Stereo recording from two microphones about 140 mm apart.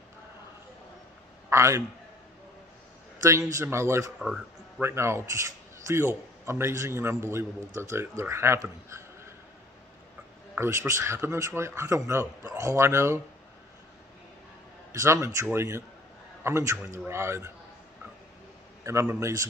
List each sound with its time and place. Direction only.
1.5 s a man's voice: 20° right (ahead or behind)
3.2 s a man's voice: 20° right (ahead or behind)
4.2 s music: 5° right (ahead or behind)
4.8 s a man's voice: 20° right (ahead or behind)
10.5 s a man's voice: 15° right (ahead or behind)
14.9 s a man's voice: 20° right (ahead or behind)
18.9 s a man's voice: 20° right (ahead or behind)